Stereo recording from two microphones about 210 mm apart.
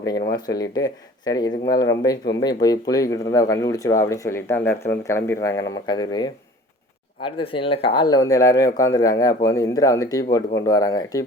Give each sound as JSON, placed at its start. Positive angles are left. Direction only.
{"t": 0.0, "sound": "speech", "side_deg": 15}